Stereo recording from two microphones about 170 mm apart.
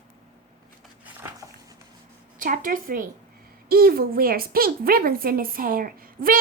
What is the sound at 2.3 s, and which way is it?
A woman's voice, 55° right (ahead or behind).